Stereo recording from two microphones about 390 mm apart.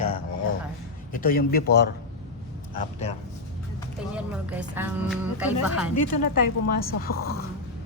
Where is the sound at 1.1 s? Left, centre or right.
Left.